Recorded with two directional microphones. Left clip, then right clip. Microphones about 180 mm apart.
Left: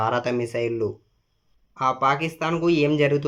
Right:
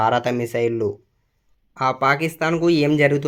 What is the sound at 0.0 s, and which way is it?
Speech, 30° right (ahead or behind).